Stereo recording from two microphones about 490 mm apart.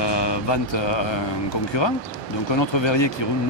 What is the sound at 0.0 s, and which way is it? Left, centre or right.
Mantra, left.